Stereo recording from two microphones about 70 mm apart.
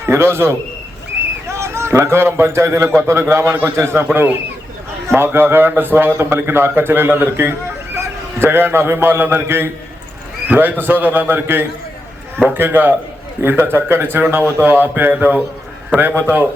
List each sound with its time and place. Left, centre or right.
0.0 s a man's voice: right
1.5 s a man's voice: right